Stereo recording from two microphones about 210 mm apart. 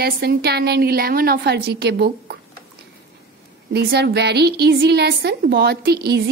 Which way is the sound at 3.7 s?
50° right (ahead or behind).